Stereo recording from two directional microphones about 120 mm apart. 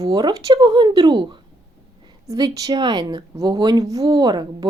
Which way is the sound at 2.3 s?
30° right (ahead or behind).